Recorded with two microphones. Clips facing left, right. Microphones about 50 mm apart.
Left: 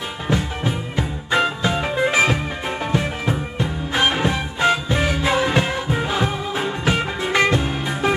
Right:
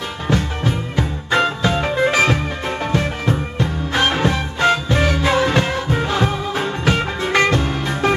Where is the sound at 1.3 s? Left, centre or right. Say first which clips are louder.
Right 2 dB; centre.